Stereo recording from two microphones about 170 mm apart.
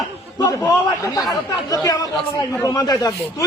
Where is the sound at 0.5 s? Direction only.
15° left (ahead or behind).